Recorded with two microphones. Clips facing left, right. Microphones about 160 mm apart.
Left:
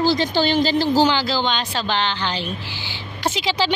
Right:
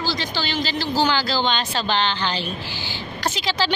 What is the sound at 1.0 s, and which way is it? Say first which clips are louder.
Speech: left 2 dB; 20° left (ahead or behind).